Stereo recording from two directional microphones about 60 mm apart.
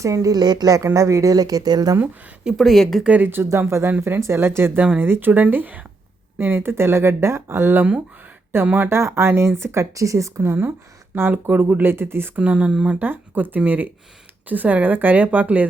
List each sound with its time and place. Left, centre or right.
0.0 s speech: right
0.9 s a woman's voice: right
1.3 s speech: right
2.6 s speech: centre
3.2 s speech: right
3.7 s speech: right
8.9 s speech: right
9.9 s a woman's voice: right
12.4 s speech: right
13.0 s speech: right